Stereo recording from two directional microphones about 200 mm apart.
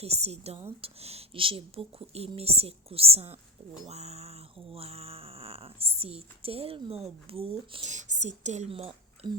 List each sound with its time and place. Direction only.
0.0 s a woman's voice: 30° right (ahead or behind)